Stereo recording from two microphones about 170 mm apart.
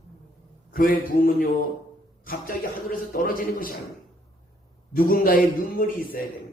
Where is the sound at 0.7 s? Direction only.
55° left (ahead or behind).